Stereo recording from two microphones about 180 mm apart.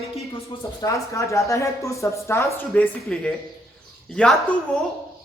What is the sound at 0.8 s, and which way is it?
Speech, 15° left (ahead or behind).